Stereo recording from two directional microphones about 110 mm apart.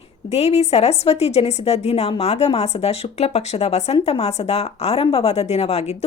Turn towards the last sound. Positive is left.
turn(degrees=70)  # may be behind; listen again after turning